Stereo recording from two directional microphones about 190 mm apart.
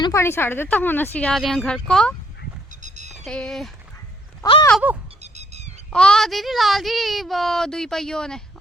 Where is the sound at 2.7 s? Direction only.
40° right (ahead or behind).